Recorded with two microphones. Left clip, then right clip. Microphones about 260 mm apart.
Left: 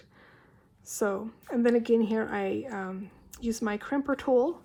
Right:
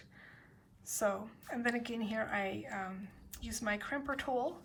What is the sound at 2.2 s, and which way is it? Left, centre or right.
A woman's voice, centre.